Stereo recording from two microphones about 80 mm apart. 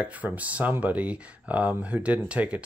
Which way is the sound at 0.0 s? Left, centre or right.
Centre.